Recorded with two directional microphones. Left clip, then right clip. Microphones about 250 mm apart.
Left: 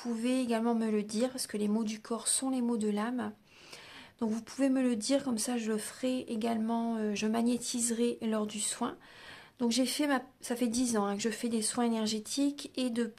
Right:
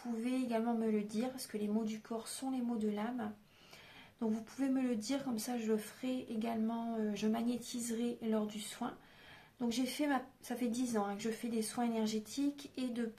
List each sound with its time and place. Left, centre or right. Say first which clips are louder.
0.0 s speech: left 6 dB; left